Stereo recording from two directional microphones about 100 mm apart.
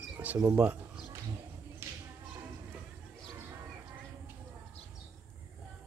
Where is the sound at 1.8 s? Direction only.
25° right (ahead or behind).